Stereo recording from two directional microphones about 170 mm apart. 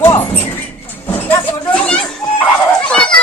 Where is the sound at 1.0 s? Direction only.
10° left (ahead or behind).